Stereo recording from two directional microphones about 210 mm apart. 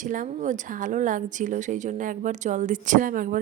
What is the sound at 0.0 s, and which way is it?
Speech, 40° right (ahead or behind).